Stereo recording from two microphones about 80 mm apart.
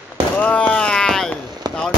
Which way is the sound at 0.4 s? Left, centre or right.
Centre.